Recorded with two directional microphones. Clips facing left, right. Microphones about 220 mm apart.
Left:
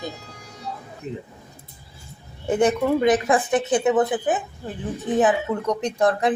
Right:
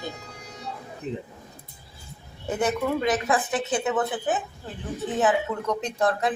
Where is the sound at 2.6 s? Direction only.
20° left (ahead or behind).